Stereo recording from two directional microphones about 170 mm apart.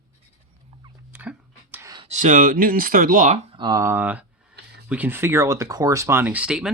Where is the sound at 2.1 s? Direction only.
45° right (ahead or behind).